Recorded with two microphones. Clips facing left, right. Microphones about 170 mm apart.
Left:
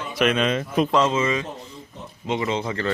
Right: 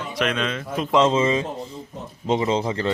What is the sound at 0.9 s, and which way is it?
Speech, 25° right (ahead or behind).